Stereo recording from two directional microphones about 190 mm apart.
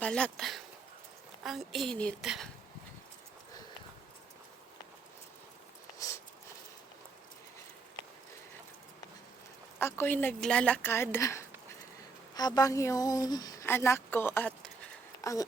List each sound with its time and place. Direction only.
0.0 s a woman's voice: 5° left (ahead or behind)
9.7 s speech: 10° left (ahead or behind)